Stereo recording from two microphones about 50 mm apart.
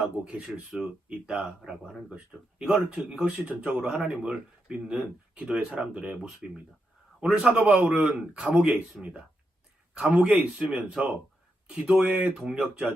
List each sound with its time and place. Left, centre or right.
0.0 s speech: right
0.4 s speech: centre
7.8 s speech: right
12.1 s speech: centre